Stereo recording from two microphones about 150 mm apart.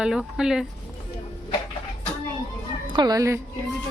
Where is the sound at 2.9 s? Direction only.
25° right (ahead or behind).